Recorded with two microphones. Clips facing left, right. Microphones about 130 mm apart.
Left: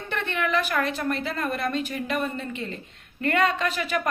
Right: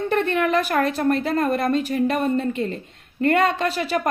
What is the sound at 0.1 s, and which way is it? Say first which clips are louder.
A woman's voice: right 5 dB; 40° right (ahead or behind).